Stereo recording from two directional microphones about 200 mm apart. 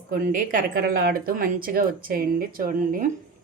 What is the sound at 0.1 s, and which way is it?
Speech, 45° right (ahead or behind).